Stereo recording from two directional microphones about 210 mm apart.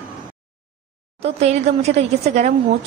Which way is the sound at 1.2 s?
30° right (ahead or behind).